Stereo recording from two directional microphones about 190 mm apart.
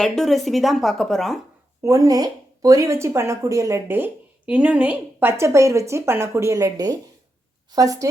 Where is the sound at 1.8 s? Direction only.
15° right (ahead or behind).